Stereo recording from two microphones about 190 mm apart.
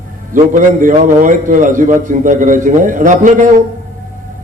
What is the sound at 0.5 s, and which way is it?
A man's voice, 45° right (ahead or behind).